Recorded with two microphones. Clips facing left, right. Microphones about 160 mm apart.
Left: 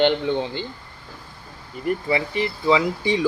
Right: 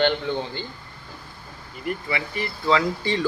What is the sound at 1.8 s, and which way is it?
Speech, 35° left (ahead or behind).